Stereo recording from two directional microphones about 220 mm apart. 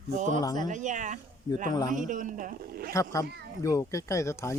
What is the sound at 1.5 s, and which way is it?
Speech, 15° left (ahead or behind).